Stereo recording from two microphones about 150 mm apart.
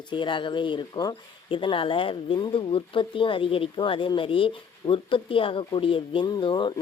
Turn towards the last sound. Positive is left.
turn(degrees=35)  # may be behind; listen again after turning